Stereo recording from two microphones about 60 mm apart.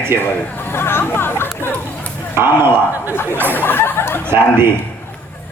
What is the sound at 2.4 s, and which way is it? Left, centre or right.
Speech, right.